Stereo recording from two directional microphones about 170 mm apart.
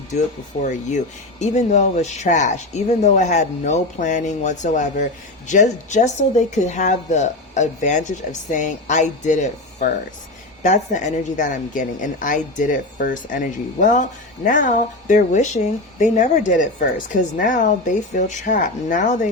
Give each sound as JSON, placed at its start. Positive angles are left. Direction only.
{"t": 0.6, "sound": "a woman's voice", "side_deg": 45}